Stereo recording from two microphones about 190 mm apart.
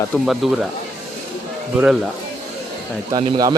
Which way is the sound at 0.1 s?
Centre (ahead or behind).